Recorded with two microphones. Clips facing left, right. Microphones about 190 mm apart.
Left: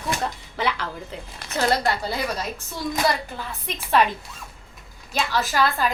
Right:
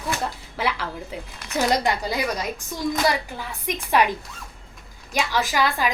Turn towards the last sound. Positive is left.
turn(degrees=-15)  # may be behind; listen again after turning